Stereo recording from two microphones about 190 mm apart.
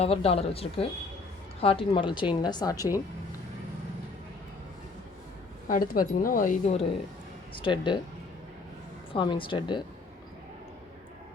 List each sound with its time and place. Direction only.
0.0 s a woman's voice: 30° left (ahead or behind)
5.6 s speech: 45° left (ahead or behind)
7.5 s a woman's voice: 25° left (ahead or behind)
9.1 s a woman's voice: 25° left (ahead or behind)